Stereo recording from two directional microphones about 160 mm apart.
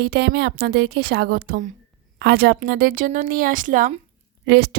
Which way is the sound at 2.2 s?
90° right.